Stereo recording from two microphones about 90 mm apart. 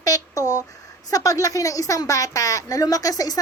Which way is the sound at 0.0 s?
40° left (ahead or behind).